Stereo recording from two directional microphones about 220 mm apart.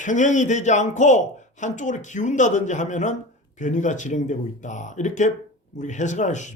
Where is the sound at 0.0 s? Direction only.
35° left (ahead or behind).